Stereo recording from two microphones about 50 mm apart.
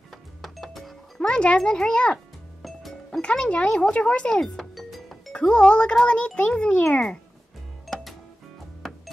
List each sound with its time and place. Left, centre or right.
0.1 s music: centre
1.2 s a child's voice: centre
4.4 s music: centre
5.3 s a child's voice: centre
7.8 s cash register: centre